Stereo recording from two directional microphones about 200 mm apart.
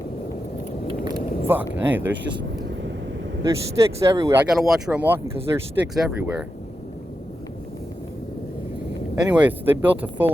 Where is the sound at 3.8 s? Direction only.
15° right (ahead or behind).